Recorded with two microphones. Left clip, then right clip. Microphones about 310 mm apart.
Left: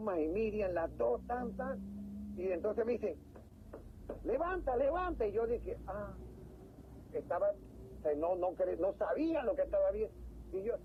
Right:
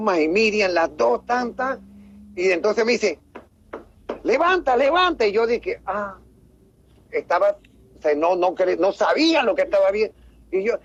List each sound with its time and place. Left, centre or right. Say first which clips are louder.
0.0 s speech: right 17 dB; right